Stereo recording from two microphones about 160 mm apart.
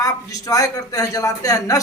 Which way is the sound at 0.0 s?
20° left (ahead or behind).